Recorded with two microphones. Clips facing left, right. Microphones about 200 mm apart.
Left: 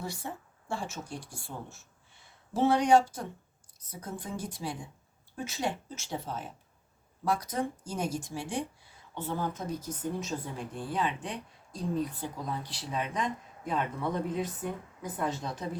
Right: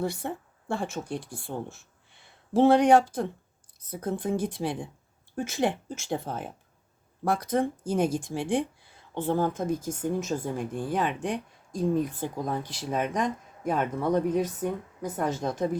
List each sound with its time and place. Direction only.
0.0 s speech: 60° right (ahead or behind)